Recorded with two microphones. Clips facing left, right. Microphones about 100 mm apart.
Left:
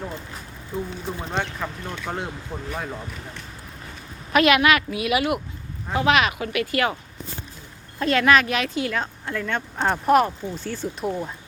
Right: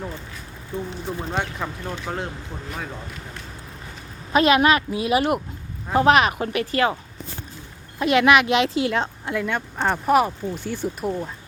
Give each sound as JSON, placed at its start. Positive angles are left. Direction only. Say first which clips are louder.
{"t": 1.3, "sound": "speech", "louder": "even", "side_deg": -10}
{"t": 4.3, "sound": "a woman's voice", "louder": "right 1 dB", "side_deg": -25}
{"t": 7.9, "sound": "a woman's voice", "louder": "right 2 dB", "side_deg": -15}
{"t": 9.3, "sound": "speech", "louder": "right 1 dB", "side_deg": -10}
{"t": 11.0, "sound": "speech", "louder": "left 1 dB", "side_deg": 5}